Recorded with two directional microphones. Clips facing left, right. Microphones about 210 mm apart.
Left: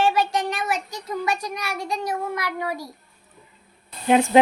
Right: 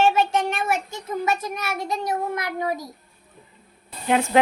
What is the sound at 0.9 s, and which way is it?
A child's voice, 25° right (ahead or behind).